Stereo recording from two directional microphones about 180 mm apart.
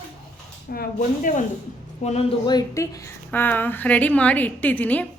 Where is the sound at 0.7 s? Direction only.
50° left (ahead or behind).